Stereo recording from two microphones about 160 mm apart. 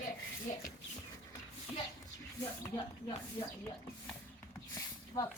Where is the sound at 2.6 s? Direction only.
25° left (ahead or behind).